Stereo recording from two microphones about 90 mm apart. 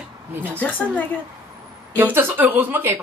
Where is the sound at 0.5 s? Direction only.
15° left (ahead or behind).